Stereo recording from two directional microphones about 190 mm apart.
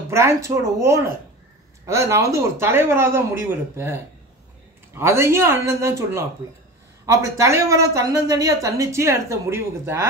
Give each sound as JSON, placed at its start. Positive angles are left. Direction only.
{"t": 0.1, "sound": "speech", "side_deg": -15}